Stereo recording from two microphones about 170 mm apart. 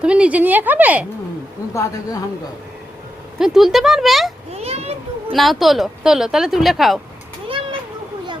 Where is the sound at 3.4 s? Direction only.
Centre (ahead or behind).